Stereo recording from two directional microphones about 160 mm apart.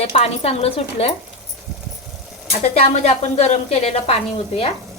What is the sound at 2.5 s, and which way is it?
Speech, 40° left (ahead or behind).